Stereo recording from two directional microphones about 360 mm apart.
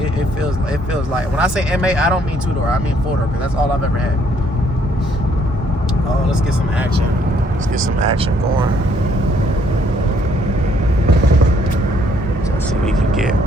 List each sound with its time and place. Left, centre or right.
1.4 s speech: centre
7.9 s speech: centre